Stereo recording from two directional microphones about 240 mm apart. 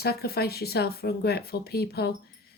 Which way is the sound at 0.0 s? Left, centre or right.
Left.